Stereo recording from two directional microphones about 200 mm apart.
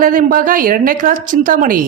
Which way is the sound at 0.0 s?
45° right (ahead or behind).